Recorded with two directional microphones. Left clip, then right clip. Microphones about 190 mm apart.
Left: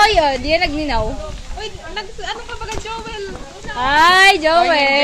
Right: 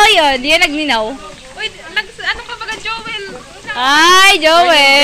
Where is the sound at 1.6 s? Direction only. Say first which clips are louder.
Right 8 dB; 30° left (ahead or behind).